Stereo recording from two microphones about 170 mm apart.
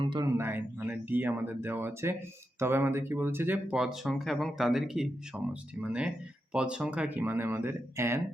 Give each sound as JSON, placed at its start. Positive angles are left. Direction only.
{"t": 0.0, "sound": "speech", "side_deg": -30}
{"t": 0.3, "sound": "speech", "side_deg": -10}